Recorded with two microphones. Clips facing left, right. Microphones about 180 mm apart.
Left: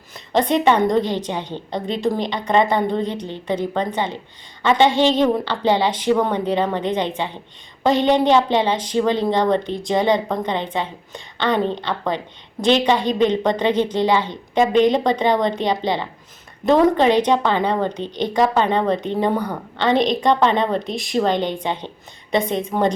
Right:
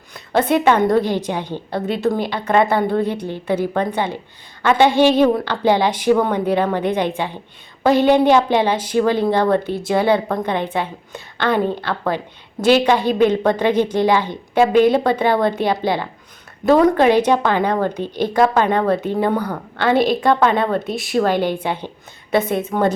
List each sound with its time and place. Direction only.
0.3 s a woman's voice: 5° right (ahead or behind)
12.9 s a woman's voice: 10° right (ahead or behind)
19.4 s a woman's voice: 10° left (ahead or behind)
19.8 s a woman's voice: 5° right (ahead or behind)